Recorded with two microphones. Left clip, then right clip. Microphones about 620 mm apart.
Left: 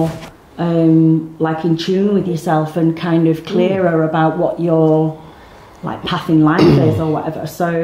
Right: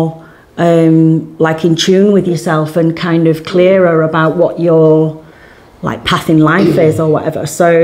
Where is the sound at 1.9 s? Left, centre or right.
Right.